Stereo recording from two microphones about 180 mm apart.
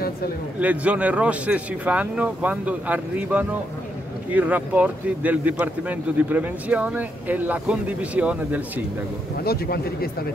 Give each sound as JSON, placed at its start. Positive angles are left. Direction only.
{"t": 0.6, "sound": "speech", "side_deg": -10}
{"t": 9.4, "sound": "speech", "side_deg": 60}